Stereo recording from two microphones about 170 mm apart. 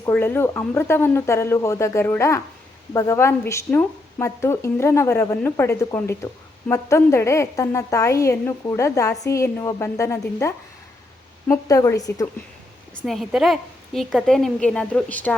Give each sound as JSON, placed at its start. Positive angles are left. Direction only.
{"t": 0.0, "sound": "a woman's voice", "side_deg": 15}
{"t": 13.1, "sound": "a woman's voice", "side_deg": 0}